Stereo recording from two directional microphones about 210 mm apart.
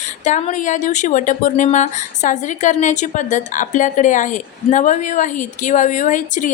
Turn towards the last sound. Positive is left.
turn(degrees=35)  # may be behind; listen again after turning